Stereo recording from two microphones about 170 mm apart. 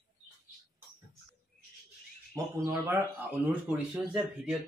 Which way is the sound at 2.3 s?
20° right (ahead or behind).